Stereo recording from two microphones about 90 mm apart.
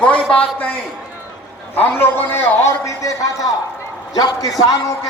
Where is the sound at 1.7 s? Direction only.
25° left (ahead or behind).